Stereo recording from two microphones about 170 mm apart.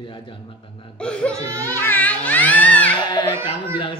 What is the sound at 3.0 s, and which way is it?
Speech, 25° left (ahead or behind).